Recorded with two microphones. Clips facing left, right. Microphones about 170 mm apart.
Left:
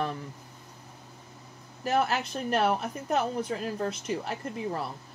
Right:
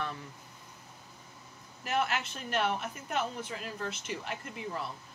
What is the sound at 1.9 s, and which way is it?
Speech, 35° left (ahead or behind).